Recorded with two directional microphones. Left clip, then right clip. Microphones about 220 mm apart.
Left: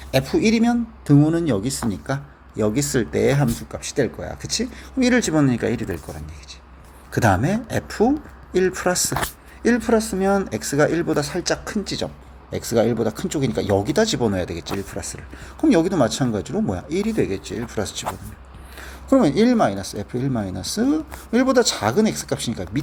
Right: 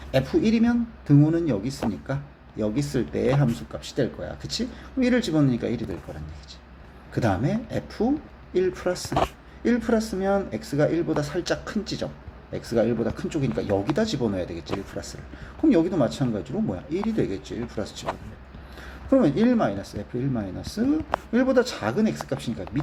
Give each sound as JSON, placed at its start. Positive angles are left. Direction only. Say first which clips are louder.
{"t": 0.1, "sound": "speech", "louder": "left 3 dB", "side_deg": 30}
{"t": 7.1, "sound": "speech", "louder": "left 6 dB", "side_deg": 30}